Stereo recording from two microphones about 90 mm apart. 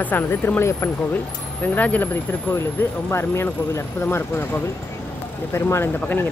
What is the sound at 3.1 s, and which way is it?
Speech, 30° left (ahead or behind).